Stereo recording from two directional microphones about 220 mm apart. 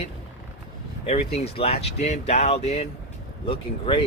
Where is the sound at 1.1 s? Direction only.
30° left (ahead or behind).